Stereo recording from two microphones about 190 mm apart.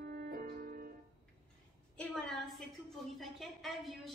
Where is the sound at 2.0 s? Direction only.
5° left (ahead or behind).